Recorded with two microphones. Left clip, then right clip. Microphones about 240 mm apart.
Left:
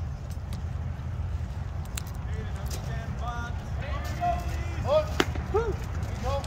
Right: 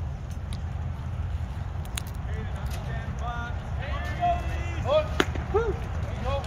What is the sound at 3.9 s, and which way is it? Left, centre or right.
Vehicle, right.